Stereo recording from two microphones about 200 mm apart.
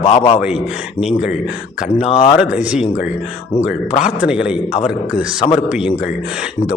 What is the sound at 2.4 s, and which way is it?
Speech, 5° right (ahead or behind).